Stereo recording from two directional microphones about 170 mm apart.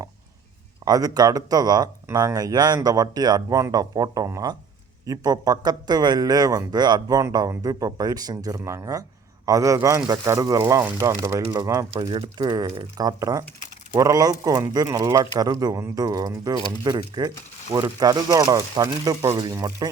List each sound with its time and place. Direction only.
0.9 s speech: 20° right (ahead or behind)